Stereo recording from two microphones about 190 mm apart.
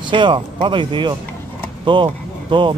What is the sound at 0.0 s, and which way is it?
Speech, 25° right (ahead or behind).